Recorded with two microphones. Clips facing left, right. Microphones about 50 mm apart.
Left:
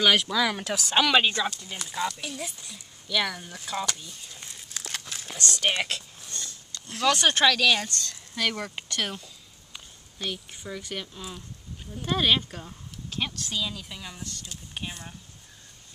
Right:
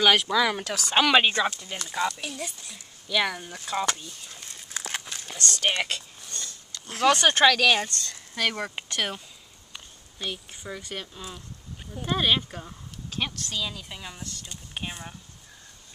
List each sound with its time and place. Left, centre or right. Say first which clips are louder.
0.0 s speech: right 1 dB; centre
0.7 s a woman's voice: left 1 dB; centre
0.9 s speech: right 2 dB; centre
1.3 s speech: right 3 dB; right
1.9 s speech: right 2 dB; centre
4.7 s crumpling: right 3 dB; right
5.0 s a sound: even; centre
6.9 s speech: right 2 dB; right
9.7 s a sound: right 1 dB; centre
10.7 s speech: left 1 dB; centre
13.4 s a woman's voice: left 1 dB; centre
14.7 s speech: right 2 dB; centre